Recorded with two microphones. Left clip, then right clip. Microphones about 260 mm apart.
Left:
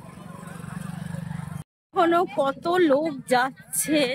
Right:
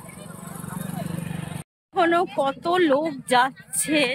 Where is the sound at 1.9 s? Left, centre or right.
Centre.